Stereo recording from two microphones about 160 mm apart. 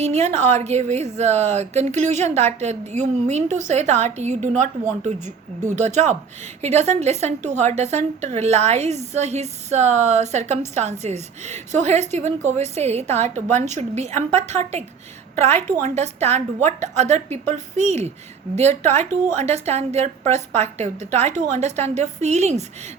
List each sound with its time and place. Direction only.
0.0 s a woman's voice: 45° right (ahead or behind)
15.8 s a woman's voice: 45° right (ahead or behind)